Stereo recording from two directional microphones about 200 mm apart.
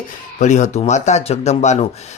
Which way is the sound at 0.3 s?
35° left (ahead or behind).